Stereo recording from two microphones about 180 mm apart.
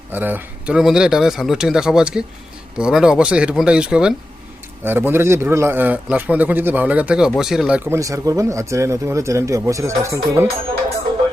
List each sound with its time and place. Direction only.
0.1 s a man's voice: 10° right (ahead or behind)
7.9 s a man's voice: 15° right (ahead or behind)